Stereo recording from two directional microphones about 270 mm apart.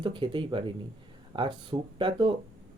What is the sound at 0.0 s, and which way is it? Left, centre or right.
Speech, centre.